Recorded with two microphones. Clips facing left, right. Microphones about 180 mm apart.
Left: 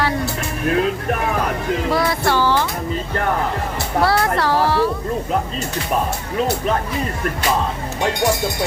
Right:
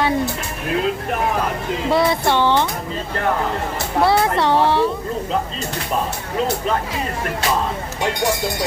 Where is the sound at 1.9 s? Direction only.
25° right (ahead or behind).